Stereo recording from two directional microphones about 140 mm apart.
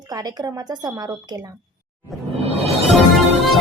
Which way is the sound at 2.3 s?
50° right (ahead or behind).